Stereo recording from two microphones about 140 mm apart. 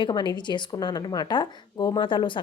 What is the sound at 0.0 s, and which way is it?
Speech, 35° left (ahead or behind).